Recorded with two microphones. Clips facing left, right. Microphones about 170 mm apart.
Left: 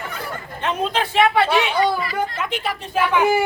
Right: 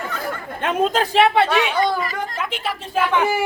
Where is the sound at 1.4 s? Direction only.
10° left (ahead or behind).